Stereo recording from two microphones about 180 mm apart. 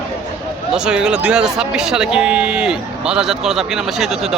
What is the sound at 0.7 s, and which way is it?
Speech, 5° right (ahead or behind).